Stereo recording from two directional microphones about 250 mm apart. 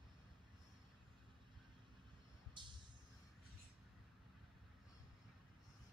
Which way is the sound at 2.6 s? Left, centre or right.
Centre.